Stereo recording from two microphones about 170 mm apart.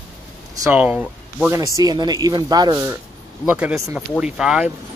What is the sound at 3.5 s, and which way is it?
Speech, 10° right (ahead or behind).